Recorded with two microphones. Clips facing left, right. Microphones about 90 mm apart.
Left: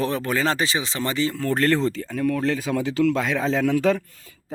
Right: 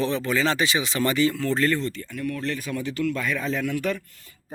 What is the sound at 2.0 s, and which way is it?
Speech, 90° left.